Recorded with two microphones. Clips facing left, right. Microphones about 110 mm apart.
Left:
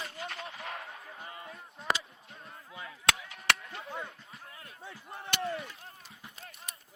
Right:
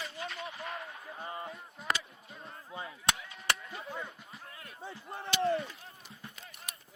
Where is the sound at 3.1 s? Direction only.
75° left (ahead or behind).